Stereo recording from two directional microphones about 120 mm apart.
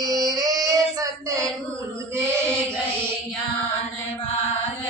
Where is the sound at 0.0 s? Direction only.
30° right (ahead or behind).